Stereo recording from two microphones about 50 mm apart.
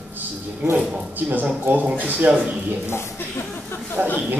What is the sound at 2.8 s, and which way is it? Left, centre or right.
Speech, left.